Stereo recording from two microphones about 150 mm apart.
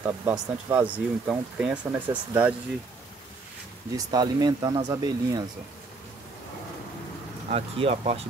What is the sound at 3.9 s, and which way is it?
Speech, 25° right (ahead or behind).